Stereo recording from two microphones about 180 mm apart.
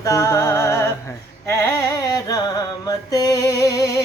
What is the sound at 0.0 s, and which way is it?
Music, 15° left (ahead or behind).